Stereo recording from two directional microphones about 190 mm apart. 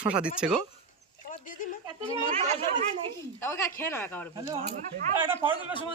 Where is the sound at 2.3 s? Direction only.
30° right (ahead or behind).